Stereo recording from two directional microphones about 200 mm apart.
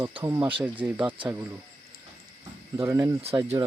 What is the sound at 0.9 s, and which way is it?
Speech, 25° right (ahead or behind).